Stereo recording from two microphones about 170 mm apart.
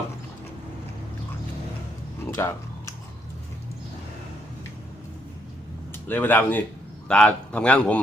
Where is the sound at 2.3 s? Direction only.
15° left (ahead or behind).